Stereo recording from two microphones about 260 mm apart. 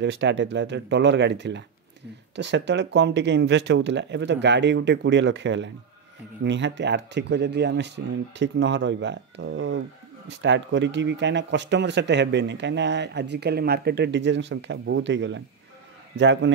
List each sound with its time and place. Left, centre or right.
0.0 s speech: right